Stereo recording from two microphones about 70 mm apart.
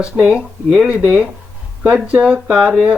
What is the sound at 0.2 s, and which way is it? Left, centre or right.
Speech, centre.